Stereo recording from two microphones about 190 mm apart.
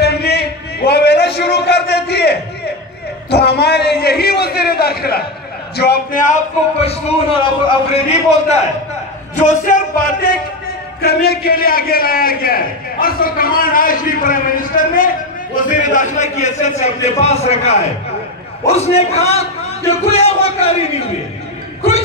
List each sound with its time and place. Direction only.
0.0 s a sound: 60° left (ahead or behind)
3.3 s a man's voice: 60° left (ahead or behind); by 10.3 s 45° left (ahead or behind)
11.0 s a man's voice: 55° left (ahead or behind); by 21.1 s 30° left (ahead or behind)